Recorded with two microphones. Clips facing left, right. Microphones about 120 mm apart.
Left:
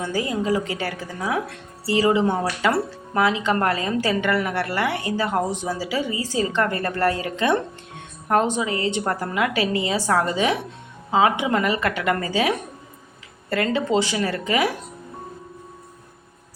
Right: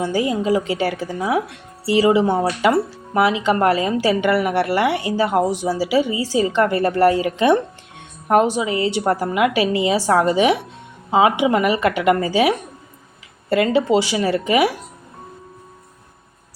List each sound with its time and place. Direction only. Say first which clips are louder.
0.0 s a woman's voice: right 4 dB; 15° right (ahead or behind)